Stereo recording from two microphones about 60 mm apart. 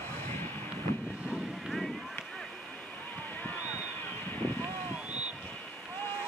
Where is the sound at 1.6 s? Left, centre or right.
Centre.